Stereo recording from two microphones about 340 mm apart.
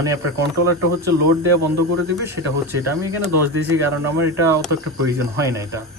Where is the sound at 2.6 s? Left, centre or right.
Centre.